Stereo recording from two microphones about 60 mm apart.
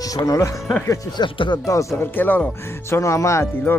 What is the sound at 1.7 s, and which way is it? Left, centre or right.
Speech, left.